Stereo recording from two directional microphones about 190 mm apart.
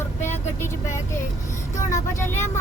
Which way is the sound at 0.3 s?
15° left (ahead or behind).